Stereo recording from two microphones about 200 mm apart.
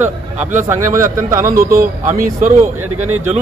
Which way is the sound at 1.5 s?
45° right (ahead or behind).